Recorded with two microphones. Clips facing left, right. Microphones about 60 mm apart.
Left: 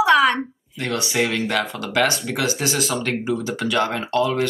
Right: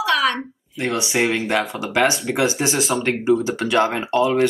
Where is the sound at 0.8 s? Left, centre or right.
Right.